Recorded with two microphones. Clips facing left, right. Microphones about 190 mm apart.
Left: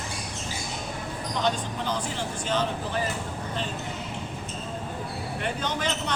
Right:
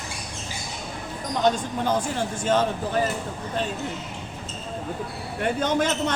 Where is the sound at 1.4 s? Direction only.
50° right (ahead or behind).